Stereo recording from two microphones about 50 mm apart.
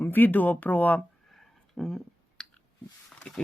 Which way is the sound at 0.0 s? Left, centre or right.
Left.